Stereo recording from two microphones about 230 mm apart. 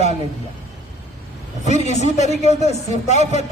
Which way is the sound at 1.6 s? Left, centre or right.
Left.